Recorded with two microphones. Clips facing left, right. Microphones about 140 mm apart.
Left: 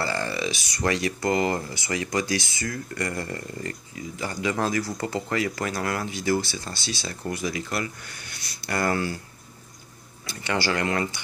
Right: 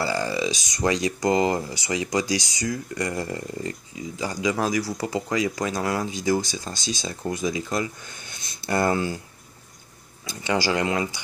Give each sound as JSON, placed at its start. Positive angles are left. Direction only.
{"t": 0.0, "sound": "speech", "side_deg": -10}
{"t": 10.2, "sound": "speech", "side_deg": -15}